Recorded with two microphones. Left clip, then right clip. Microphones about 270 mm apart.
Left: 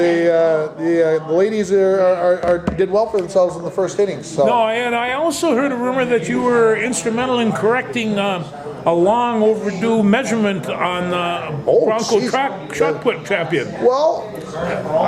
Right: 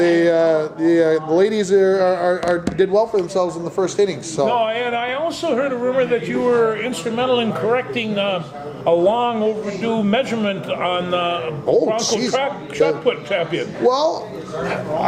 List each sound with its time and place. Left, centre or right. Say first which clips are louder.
0.0 s speech: left 1 dB; right
4.4 s speech: left 3 dB; left
11.9 s speech: left 3 dB; right
13.1 s speech: left 1 dB; left
13.8 s speech: left 2 dB; right